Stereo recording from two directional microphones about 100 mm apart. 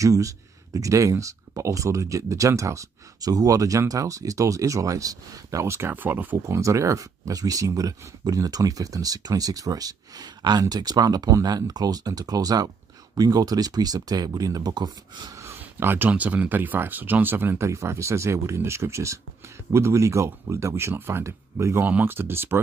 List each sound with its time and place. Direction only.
0.0 s speech: 35° right (ahead or behind)
6.5 s speech: 30° right (ahead or behind); by 15.3 s 45° right (ahead or behind)
15.6 s speech: 20° right (ahead or behind)